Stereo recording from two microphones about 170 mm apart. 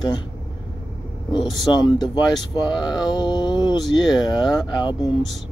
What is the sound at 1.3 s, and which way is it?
Speech, 25° left (ahead or behind).